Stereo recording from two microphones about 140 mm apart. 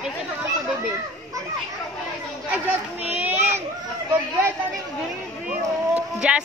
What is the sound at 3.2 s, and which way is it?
Children playing, 15° right (ahead or behind).